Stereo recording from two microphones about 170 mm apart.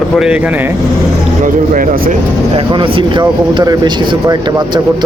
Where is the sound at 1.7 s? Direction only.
55° right (ahead or behind).